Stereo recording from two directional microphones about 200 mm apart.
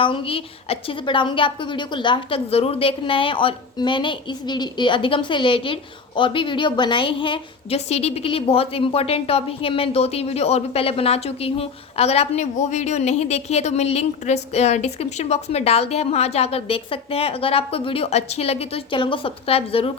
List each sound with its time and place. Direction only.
0.0 s a woman's voice: 25° left (ahead or behind)